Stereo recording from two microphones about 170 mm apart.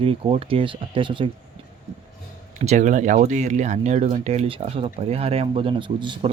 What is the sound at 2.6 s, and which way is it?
Speech, 45° right (ahead or behind).